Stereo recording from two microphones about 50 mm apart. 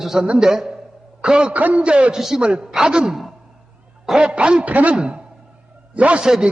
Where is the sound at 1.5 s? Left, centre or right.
Right.